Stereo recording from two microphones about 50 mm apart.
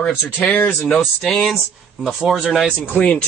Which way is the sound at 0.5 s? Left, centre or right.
Left.